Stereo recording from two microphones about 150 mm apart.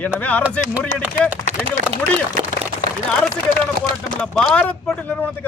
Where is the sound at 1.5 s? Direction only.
40° right (ahead or behind).